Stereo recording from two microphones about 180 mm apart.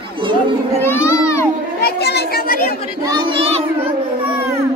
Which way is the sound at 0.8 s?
15° left (ahead or behind).